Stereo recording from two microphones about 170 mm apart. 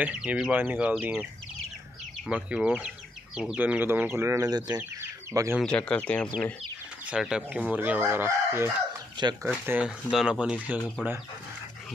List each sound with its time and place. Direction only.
0.0 s chicken: 10° right (ahead or behind)
2.2 s speech: 5° right (ahead or behind)
3.3 s chicken: 5° right (ahead or behind); by 4.7 s 25° right (ahead or behind)
4.7 s bird: 15° right (ahead or behind)
5.5 s speech: 5° left (ahead or behind)
7.1 s chicken: 5° right (ahead or behind)
9.5 s speech: 5° right (ahead or behind)